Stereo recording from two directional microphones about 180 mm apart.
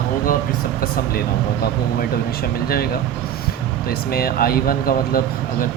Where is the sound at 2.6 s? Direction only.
55° left (ahead or behind).